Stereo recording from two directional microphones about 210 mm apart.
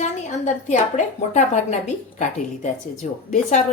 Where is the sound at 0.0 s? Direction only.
35° left (ahead or behind).